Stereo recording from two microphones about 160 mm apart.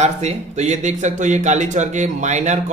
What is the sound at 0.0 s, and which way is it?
Speech, 45° right (ahead or behind).